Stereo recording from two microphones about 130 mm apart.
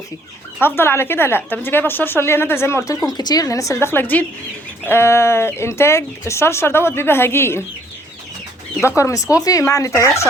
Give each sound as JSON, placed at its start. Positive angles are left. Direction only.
{"t": 0.6, "sound": "speech", "side_deg": 15}
{"t": 9.0, "sound": "speech", "side_deg": 25}